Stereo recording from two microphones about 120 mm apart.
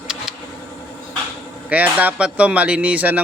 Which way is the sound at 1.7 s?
15° right (ahead or behind).